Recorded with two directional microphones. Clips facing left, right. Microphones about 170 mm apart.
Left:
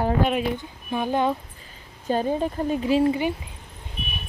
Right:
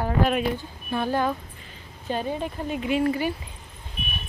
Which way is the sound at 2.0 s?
40° left (ahead or behind).